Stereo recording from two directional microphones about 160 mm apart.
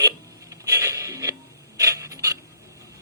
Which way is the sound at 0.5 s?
20° right (ahead or behind).